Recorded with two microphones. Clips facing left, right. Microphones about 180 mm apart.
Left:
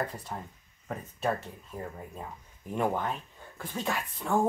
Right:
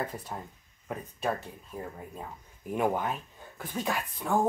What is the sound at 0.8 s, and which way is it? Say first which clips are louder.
Speech: left 1 dB; centre (ahead or behind).